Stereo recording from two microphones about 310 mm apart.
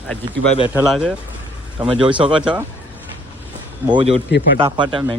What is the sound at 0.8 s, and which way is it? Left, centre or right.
A man's voice, centre.